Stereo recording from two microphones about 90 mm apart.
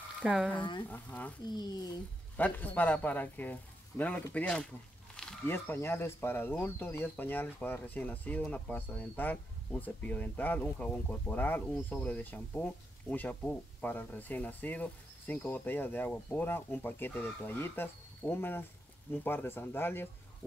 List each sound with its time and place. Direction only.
0.2 s speech: 5° right (ahead or behind)
0.8 s speech: 20° left (ahead or behind)
1.5 s speech: 50° left (ahead or behind)
2.3 s speech: 15° left (ahead or behind)
5.2 s wild animals: 5° left (ahead or behind)
5.5 s speech: 25° left (ahead or behind)